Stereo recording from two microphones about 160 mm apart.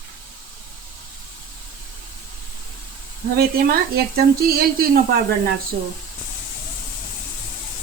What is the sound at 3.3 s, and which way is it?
Speech, 70° right (ahead or behind).